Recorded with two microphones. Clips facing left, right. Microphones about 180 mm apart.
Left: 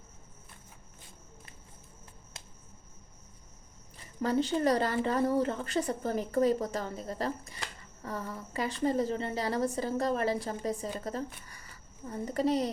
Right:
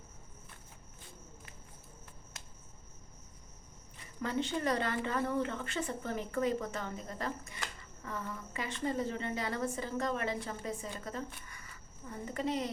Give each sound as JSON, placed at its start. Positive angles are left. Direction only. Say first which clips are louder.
{"t": 3.9, "sound": "speech", "louder": "left 6 dB", "side_deg": 35}